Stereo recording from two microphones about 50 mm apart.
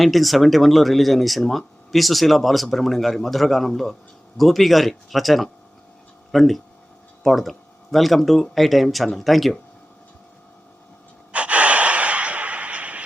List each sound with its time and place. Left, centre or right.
0.0 s speech: centre
11.3 s gasp: right